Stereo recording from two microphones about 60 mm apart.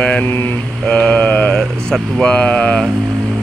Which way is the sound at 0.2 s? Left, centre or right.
Left.